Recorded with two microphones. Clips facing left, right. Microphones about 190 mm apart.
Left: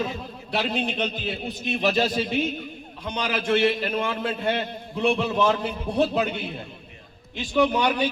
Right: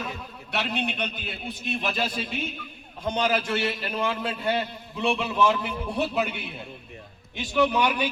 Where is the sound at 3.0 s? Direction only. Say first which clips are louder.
Right 4 dB; 45° right (ahead or behind).